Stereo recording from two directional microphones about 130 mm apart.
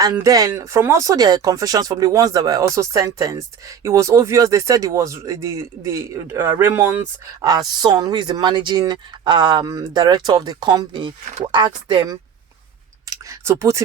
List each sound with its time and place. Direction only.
0.0 s speech: 25° right (ahead or behind)
7.4 s speech: 30° right (ahead or behind)
13.1 s speech: 20° right (ahead or behind)